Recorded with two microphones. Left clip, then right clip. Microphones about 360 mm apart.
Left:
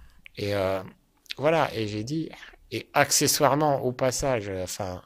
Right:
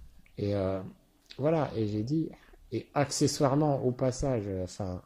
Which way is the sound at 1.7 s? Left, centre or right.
Left.